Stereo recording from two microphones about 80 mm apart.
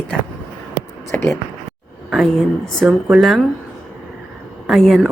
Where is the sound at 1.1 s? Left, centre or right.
Left.